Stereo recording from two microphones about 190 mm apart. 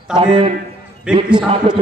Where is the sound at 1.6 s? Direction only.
35° right (ahead or behind).